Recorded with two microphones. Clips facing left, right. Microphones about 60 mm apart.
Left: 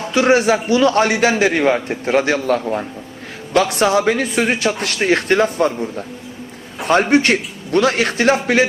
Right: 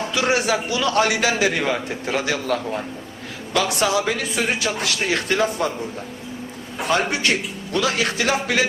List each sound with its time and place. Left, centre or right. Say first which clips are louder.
0.1 s a man's voice: left 8 dB; left
6.8 s a man's voice: left 7 dB; left